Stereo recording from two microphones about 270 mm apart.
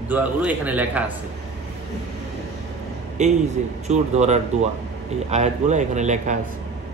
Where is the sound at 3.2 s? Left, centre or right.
Right.